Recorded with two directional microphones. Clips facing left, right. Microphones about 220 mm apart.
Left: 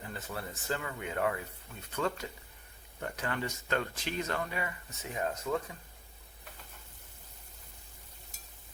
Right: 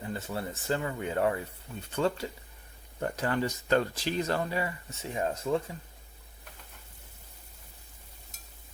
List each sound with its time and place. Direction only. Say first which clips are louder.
0.1 s speech: right 6 dB; 25° right (ahead or behind)